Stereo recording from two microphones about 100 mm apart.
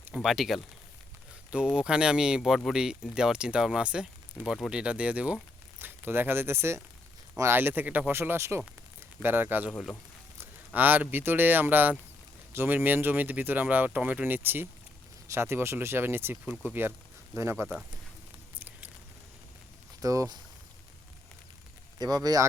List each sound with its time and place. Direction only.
0.1 s speech: 5° right (ahead or behind); by 9.7 s 20° right (ahead or behind)
10.8 s speech: 20° right (ahead or behind)
20.0 s speech: 35° right (ahead or behind)
21.9 s speech: 40° right (ahead or behind)